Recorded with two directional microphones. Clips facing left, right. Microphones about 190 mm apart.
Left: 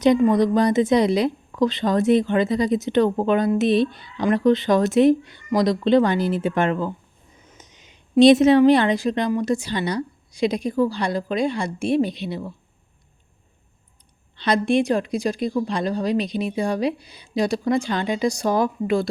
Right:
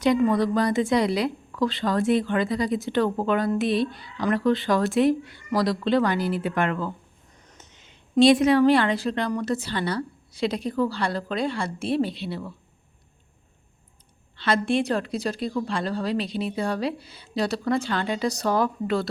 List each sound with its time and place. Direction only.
0.0 s a woman's voice: 20° left (ahead or behind)
7.3 s a sound: 5° left (ahead or behind)
9.3 s a woman's voice: 15° left (ahead or behind)
14.3 s a woman's voice: 20° left (ahead or behind)